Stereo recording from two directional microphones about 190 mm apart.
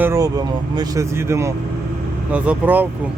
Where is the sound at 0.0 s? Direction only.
15° right (ahead or behind).